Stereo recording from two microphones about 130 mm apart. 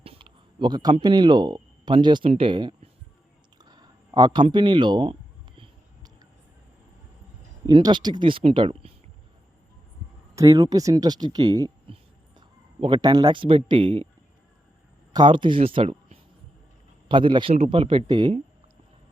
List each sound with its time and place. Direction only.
0.0 s a sound: 45° right (ahead or behind)
1.0 s speech: 35° right (ahead or behind)
3.6 s a sound: 30° right (ahead or behind)
4.5 s speech: 35° right (ahead or behind)
7.7 s speech: 35° right (ahead or behind)
10.3 s speech: 25° right (ahead or behind)
15.1 s speech: 35° right (ahead or behind)
17.1 s speech: 35° right (ahead or behind)